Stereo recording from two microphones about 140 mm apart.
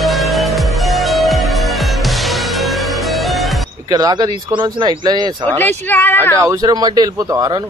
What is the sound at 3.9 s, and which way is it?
Speech, 30° right (ahead or behind).